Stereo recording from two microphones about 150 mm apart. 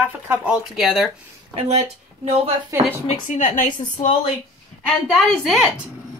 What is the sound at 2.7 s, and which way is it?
Speech, 20° right (ahead or behind).